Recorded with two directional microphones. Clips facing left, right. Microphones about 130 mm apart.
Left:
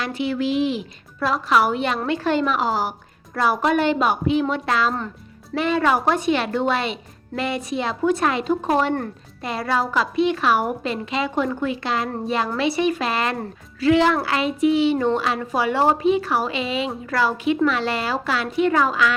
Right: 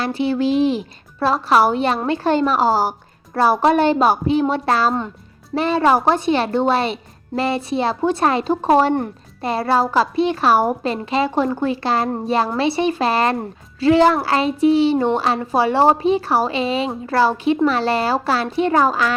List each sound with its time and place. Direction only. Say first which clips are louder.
0.0 s speech: right 4 dB; 30° right (ahead or behind)